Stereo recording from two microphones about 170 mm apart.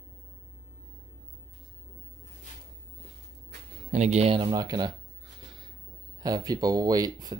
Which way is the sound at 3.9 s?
40° right (ahead or behind).